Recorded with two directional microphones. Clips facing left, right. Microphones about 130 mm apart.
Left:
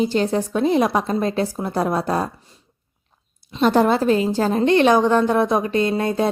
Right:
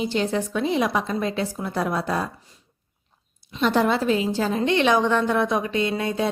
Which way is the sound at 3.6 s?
45° left (ahead or behind).